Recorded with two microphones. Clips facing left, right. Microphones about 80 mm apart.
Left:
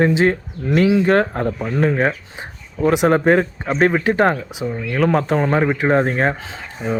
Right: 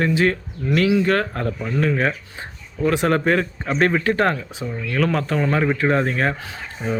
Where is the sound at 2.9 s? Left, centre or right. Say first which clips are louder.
Left 4 dB; centre.